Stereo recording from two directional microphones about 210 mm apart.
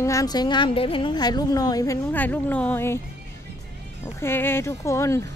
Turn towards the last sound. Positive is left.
turn(degrees=15)  # may be behind; listen again after turning